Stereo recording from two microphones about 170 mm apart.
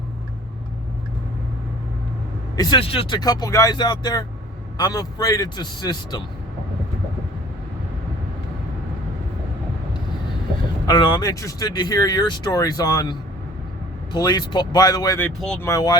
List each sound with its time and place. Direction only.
2.6 s speech: 25° left (ahead or behind)
10.8 s speech: 25° left (ahead or behind)
15.2 s speech: 5° left (ahead or behind)
15.6 s speech: 20° left (ahead or behind)